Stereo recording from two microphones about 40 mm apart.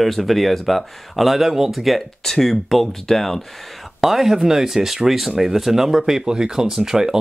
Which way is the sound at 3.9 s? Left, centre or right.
Centre.